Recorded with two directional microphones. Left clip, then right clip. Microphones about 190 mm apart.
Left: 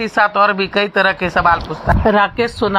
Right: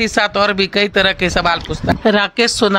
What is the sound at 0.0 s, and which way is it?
Speech, 35° right (ahead or behind).